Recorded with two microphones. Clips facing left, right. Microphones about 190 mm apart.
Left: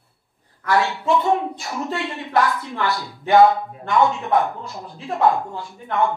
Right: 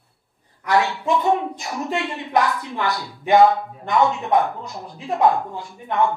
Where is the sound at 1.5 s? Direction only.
20° right (ahead or behind).